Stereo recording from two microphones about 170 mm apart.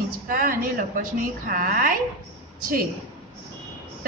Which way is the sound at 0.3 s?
55° right (ahead or behind).